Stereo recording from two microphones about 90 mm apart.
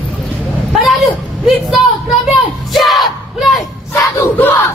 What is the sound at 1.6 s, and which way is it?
Speech, 5° right (ahead or behind).